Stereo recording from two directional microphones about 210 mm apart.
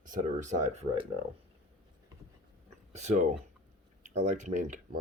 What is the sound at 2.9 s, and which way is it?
Speech, 35° right (ahead or behind).